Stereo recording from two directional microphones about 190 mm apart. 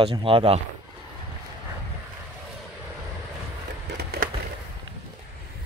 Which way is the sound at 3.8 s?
60° right (ahead or behind).